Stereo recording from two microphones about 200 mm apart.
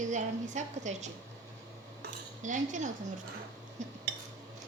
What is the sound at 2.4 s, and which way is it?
A woman's voice, 40° right (ahead or behind).